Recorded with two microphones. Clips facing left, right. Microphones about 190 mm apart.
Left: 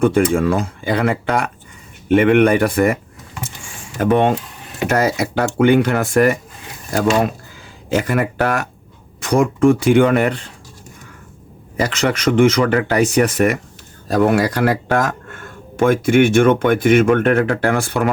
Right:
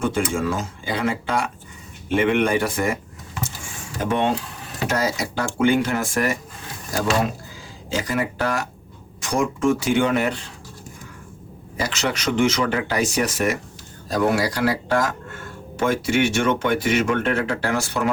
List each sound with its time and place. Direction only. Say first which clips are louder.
0.0 s speech: left 8 dB; 60° left (ahead or behind)
4.0 s speech: left 7 dB; 60° left (ahead or behind)
7.9 s speech: left 6 dB; 60° left (ahead or behind)
11.8 s speech: left 7 dB; 55° left (ahead or behind)